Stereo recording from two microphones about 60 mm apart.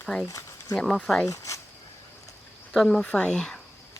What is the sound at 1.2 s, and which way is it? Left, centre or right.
Zipper, left.